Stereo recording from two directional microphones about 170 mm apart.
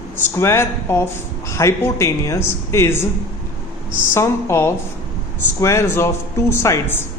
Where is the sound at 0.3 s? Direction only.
15° left (ahead or behind).